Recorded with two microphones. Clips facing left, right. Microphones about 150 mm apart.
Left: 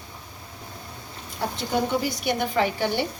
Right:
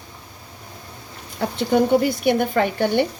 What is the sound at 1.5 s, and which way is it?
A woman's voice, 60° right (ahead or behind).